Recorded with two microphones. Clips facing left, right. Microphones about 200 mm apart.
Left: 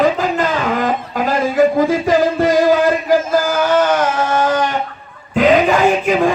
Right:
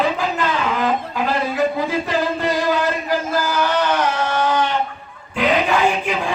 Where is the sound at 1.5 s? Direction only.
45° left (ahead or behind).